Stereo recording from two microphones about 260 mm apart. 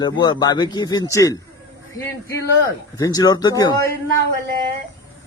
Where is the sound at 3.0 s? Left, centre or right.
Centre.